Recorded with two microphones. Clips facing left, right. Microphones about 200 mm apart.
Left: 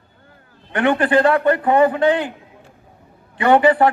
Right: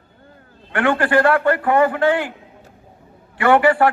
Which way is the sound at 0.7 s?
20° left (ahead or behind).